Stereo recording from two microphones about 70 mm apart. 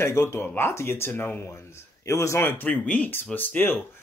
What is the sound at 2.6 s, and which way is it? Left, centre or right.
Speech, centre.